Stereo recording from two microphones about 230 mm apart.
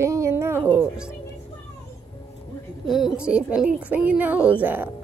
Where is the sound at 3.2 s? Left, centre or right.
Centre.